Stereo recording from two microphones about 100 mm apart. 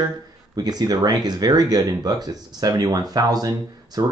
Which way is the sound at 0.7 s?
40° right (ahead or behind).